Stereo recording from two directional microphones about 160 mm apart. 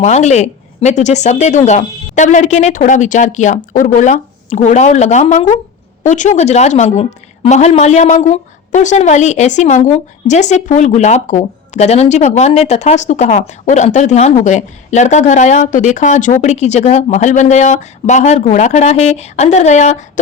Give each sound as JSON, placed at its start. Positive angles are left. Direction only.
{"t": 0.0, "sound": "a woman's voice", "side_deg": 45}